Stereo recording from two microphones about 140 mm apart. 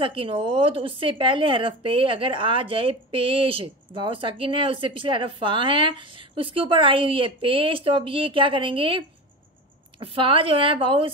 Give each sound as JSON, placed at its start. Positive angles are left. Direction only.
{"t": 0.0, "sound": "speech", "side_deg": -40}